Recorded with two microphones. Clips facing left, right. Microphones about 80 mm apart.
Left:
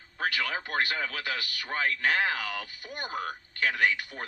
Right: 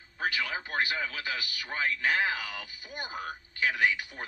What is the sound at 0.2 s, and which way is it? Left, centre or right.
A man's voice, left.